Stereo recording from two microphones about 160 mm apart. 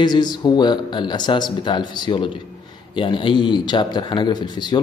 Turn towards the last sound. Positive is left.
turn(degrees=25)  # may be behind; listen again after turning